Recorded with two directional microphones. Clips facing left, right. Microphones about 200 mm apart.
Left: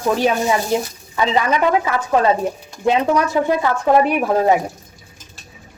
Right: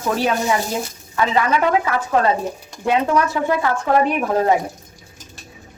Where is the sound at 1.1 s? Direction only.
20° left (ahead or behind).